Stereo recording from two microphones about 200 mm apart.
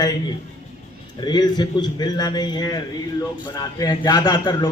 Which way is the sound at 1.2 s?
20° left (ahead or behind).